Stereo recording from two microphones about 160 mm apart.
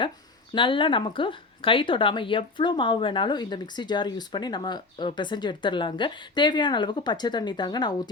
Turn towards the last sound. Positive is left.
turn(degrees=25)  # may be behind; listen again after turning